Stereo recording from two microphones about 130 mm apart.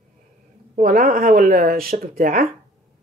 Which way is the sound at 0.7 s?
90° right.